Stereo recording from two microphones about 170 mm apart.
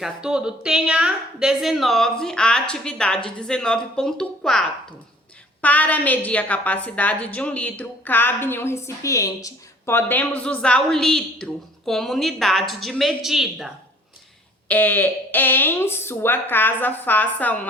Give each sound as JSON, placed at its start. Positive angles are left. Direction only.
{"t": 0.0, "sound": "a woman's voice", "side_deg": -5}
{"t": 14.7, "sound": "a woman's voice", "side_deg": 10}